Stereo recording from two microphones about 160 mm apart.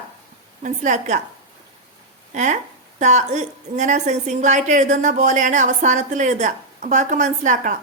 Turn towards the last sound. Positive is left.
turn(degrees=-55)  # may be behind; listen again after turning